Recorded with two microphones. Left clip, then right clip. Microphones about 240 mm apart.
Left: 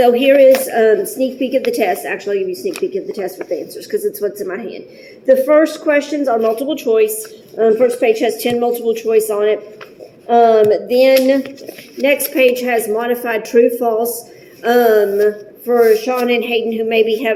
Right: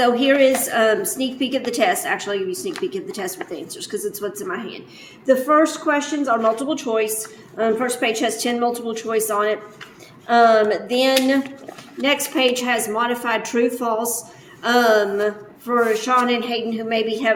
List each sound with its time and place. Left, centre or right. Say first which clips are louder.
0.0 s a woman's voice: left 7 dB; centre
5.8 s a woman's voice: left 6 dB; centre
10.6 s a woman's voice: left 7 dB; centre